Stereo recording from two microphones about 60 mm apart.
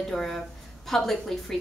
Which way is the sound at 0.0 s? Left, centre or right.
Centre.